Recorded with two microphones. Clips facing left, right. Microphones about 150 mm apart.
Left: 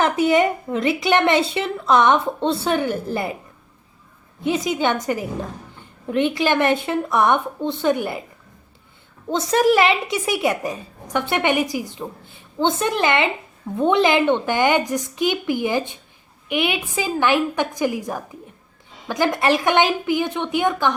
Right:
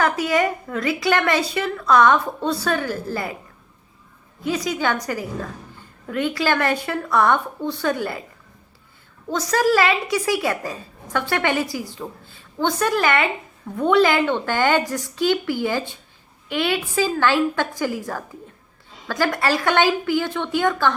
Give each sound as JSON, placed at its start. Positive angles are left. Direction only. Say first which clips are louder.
{"t": 0.0, "sound": "a woman's voice", "louder": "left 3 dB", "side_deg": 20}
{"t": 4.4, "sound": "a woman's voice", "louder": "left 2 dB", "side_deg": 25}
{"t": 9.3, "sound": "a woman's voice", "louder": "left 2 dB", "side_deg": 25}